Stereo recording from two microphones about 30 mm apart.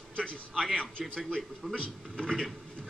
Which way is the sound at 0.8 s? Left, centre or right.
Left.